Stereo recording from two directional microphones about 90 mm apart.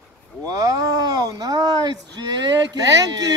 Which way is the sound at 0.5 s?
40° right (ahead or behind).